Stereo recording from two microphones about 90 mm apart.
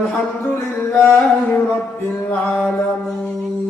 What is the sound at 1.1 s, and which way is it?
Music, 10° left (ahead or behind).